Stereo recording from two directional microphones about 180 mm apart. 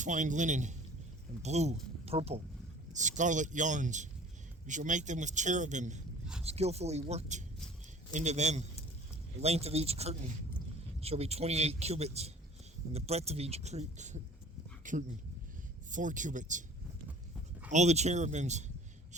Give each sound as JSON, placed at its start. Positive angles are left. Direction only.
{"t": 0.0, "sound": "a man's voice", "side_deg": -45}
{"t": 17.7, "sound": "speech", "side_deg": -40}